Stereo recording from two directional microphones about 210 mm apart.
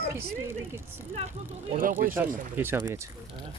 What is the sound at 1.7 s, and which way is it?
Speech, 40° right (ahead or behind).